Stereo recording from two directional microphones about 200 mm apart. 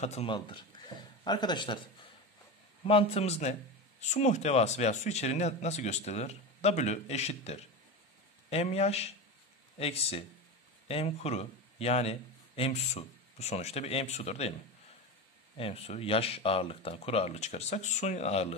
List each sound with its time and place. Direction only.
0.0 s a man's voice: 30° left (ahead or behind)
2.9 s speech: 30° left (ahead or behind)
15.5 s speech: 30° left (ahead or behind)